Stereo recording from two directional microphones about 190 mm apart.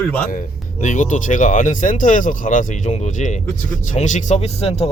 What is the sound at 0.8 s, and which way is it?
Speech, 40° left (ahead or behind).